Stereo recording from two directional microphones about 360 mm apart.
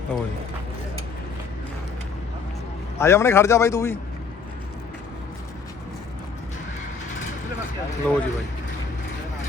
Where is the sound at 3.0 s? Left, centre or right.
Centre.